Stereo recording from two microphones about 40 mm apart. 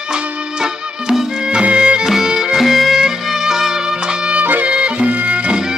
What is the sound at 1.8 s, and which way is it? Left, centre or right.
Music, right.